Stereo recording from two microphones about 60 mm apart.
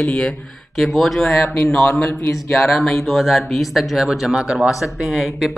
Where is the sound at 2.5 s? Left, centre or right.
Centre.